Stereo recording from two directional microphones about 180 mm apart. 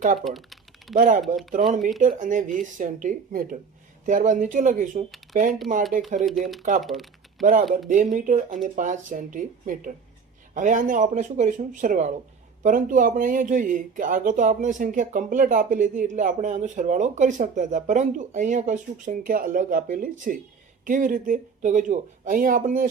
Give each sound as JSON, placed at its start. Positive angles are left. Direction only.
{"t": 0.3, "sound": "typing", "side_deg": 0}
{"t": 0.9, "sound": "speech", "side_deg": -50}
{"t": 6.1, "sound": "speech", "side_deg": 0}
{"t": 6.6, "sound": "speech", "side_deg": -50}
{"t": 6.8, "sound": "typing", "side_deg": 0}
{"t": 7.4, "sound": "speech", "side_deg": -50}